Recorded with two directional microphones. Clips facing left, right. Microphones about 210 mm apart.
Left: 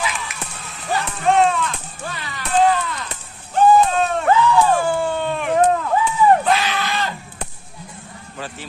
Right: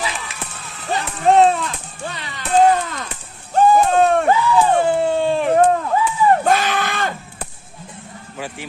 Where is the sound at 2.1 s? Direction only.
20° right (ahead or behind).